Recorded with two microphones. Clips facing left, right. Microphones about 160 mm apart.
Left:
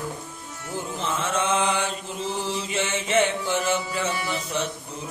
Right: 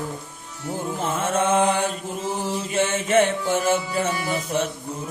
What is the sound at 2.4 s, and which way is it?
Music, 45° right (ahead or behind).